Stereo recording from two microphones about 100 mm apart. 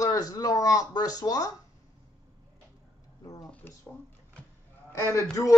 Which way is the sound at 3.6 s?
20° left (ahead or behind).